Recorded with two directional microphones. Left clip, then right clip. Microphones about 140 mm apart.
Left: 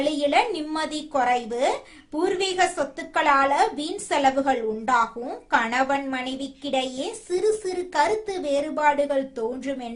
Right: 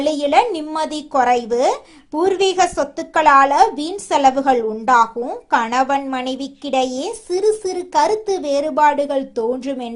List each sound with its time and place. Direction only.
0.0 s a woman's voice: 45° right (ahead or behind)